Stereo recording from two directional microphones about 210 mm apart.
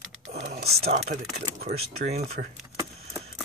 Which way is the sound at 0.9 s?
35° right (ahead or behind).